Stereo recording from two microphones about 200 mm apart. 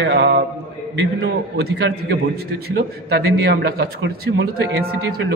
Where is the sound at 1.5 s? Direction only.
60° right (ahead or behind).